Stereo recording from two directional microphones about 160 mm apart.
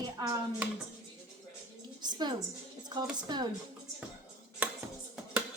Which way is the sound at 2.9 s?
25° right (ahead or behind).